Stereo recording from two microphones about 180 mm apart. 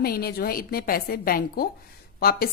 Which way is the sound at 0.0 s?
60° left (ahead or behind).